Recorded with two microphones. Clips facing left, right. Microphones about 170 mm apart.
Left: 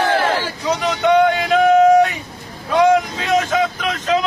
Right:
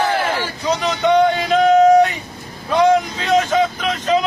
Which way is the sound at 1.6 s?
10° left (ahead or behind).